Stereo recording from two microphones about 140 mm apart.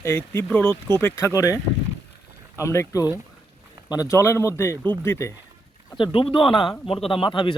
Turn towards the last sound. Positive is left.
turn(degrees=35)  # may be behind; listen again after turning